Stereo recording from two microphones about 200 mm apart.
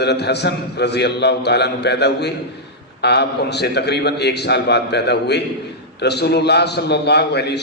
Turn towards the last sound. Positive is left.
turn(degrees=55)  # may be behind; listen again after turning